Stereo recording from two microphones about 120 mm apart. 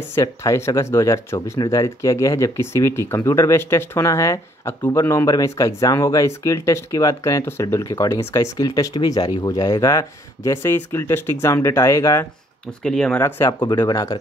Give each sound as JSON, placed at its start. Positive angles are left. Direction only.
{"t": 0.1, "sound": "speech", "side_deg": 25}
{"t": 12.8, "sound": "speech", "side_deg": 5}
{"t": 13.1, "sound": "speech", "side_deg": 20}
{"t": 13.5, "sound": "speech", "side_deg": 40}